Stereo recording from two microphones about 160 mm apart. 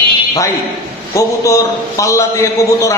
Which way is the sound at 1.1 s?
20° left (ahead or behind).